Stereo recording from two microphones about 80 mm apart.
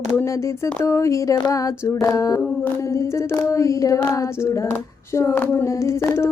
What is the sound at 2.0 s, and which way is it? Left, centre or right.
Speech, left.